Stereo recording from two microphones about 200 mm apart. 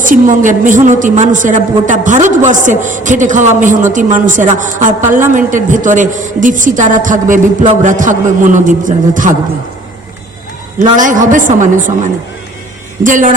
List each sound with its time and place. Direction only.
0.0 s a woman's voice: 40° right (ahead or behind)
10.9 s a woman's voice: 40° right (ahead or behind)
13.0 s a woman's voice: 40° right (ahead or behind)